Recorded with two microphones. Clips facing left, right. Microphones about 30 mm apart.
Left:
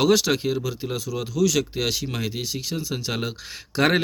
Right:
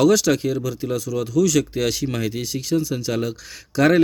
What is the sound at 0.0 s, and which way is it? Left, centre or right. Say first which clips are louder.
Speech: right 3 dB; centre.